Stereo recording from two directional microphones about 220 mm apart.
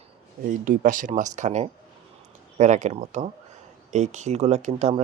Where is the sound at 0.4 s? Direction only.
35° right (ahead or behind).